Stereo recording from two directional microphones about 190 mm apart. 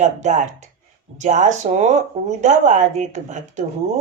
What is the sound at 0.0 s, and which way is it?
Speech, 40° right (ahead or behind).